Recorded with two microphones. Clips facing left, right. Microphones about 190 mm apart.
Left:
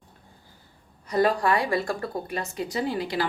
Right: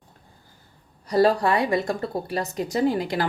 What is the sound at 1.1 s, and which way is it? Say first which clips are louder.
A woman's voice: right 3 dB; 30° right (ahead or behind).